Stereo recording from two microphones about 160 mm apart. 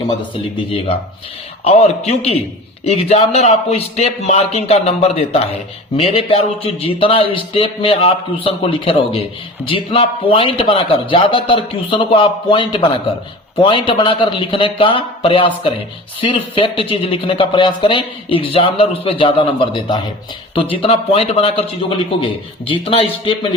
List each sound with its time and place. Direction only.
1.6 s speech: 40° left (ahead or behind)